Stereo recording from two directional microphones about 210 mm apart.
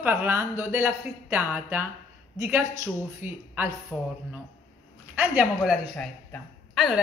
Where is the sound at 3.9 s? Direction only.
10° left (ahead or behind).